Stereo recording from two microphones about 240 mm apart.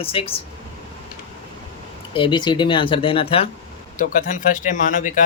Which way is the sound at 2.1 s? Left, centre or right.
Centre.